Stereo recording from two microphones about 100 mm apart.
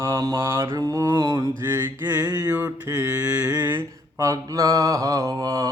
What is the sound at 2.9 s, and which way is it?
Mantra, 30° right (ahead or behind).